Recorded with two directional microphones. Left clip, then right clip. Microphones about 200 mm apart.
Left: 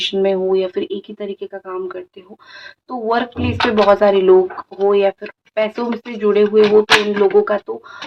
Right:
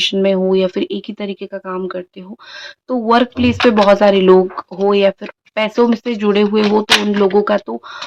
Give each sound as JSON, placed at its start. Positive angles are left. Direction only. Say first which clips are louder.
{"t": 0.0, "sound": "speech", "louder": "right 2 dB", "side_deg": -40}
{"t": 3.1, "sound": "speech", "louder": "right 5 dB", "side_deg": -50}
{"t": 6.7, "sound": "speech", "louder": "left 1 dB", "side_deg": -20}
{"t": 7.7, "sound": "speech", "louder": "right 1 dB", "side_deg": -55}